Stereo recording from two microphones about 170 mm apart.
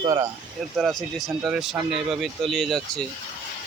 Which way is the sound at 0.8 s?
Centre (ahead or behind).